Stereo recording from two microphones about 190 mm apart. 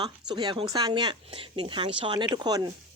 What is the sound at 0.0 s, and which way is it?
Speech, 20° right (ahead or behind).